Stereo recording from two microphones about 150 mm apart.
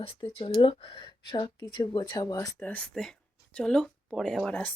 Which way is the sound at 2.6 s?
10° left (ahead or behind).